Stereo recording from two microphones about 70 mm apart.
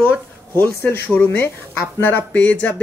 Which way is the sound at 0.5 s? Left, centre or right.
Left.